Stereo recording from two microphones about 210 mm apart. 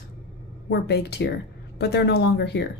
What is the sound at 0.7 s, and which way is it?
Speech, 50° left (ahead or behind).